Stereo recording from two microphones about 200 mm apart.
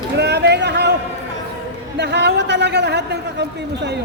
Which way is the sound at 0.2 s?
55° right (ahead or behind).